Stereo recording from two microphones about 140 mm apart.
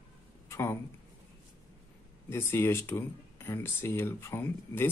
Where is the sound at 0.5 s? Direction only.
20° left (ahead or behind).